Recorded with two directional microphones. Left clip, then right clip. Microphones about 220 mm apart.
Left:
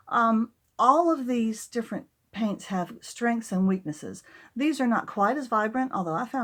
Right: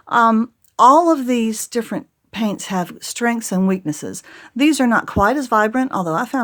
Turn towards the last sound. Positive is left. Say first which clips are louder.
# right 9 dB
turn(degrees=-40)  # may be behind; listen again after turning